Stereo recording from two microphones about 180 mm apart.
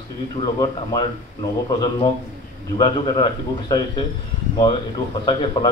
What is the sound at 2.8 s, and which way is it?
A man's voice, 25° left (ahead or behind).